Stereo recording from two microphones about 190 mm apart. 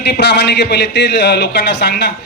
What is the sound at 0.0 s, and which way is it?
A man's voice, 65° left (ahead or behind).